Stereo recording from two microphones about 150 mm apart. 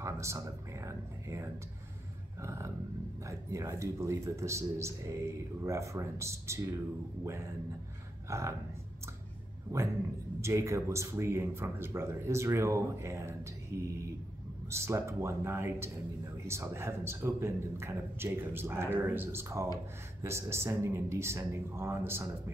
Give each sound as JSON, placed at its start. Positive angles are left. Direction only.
{"t": 0.0, "sound": "speech", "side_deg": -20}
{"t": 8.3, "sound": "speech", "side_deg": -20}
{"t": 10.4, "sound": "a man's voice", "side_deg": -20}